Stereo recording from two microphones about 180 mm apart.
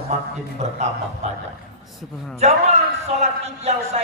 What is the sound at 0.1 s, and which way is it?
A man's voice, 40° right (ahead or behind).